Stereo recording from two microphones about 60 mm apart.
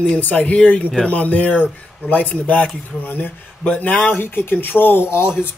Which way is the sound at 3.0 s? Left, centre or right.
Left.